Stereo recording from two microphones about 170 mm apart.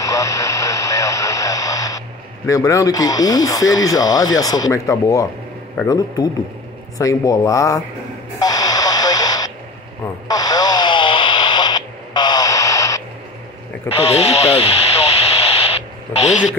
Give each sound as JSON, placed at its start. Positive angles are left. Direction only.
{"t": 0.0, "sound": "radio", "side_deg": 20}
{"t": 5.9, "sound": "speech", "side_deg": 20}
{"t": 8.4, "sound": "radio", "side_deg": 20}
{"t": 13.8, "sound": "speech", "side_deg": 35}
{"t": 16.1, "sound": "speech", "side_deg": 40}